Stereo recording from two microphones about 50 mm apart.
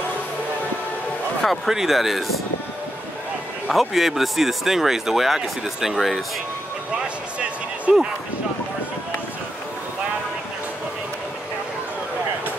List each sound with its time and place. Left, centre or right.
1.7 s speech: centre
3.7 s speech: centre
7.9 s speech: right